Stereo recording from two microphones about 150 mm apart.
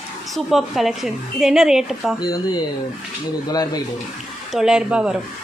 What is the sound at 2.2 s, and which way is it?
Speech, 30° left (ahead or behind).